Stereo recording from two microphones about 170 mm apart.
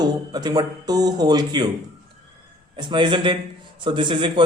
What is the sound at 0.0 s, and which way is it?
A man's voice, 25° right (ahead or behind).